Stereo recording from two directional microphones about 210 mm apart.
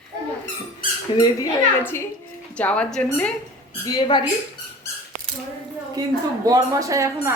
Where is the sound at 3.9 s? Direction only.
20° left (ahead or behind).